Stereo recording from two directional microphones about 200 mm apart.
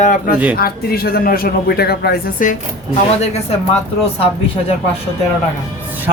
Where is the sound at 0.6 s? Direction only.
50° left (ahead or behind).